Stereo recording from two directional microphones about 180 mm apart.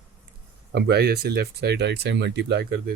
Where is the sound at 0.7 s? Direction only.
65° right (ahead or behind).